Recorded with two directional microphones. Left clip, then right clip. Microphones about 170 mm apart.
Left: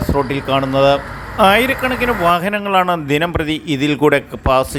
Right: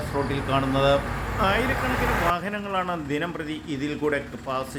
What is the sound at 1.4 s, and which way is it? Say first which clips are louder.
A man's voice: left 12 dB; 50° left (ahead or behind).